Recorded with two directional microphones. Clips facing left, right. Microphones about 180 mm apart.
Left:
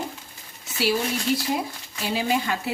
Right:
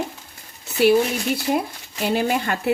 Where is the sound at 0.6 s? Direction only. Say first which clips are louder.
Right 8 dB; 60° right (ahead or behind).